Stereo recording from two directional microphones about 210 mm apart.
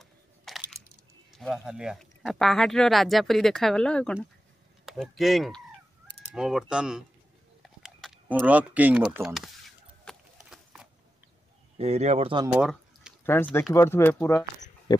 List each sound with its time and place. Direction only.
0.0 s a sound: centre (ahead or behind)
1.3 s speech: centre (ahead or behind)
10.0 s horse: centre (ahead or behind)
11.8 s speech: 30° right (ahead or behind)
12.5 s drip: 5° right (ahead or behind)
13.2 s speech: 10° left (ahead or behind)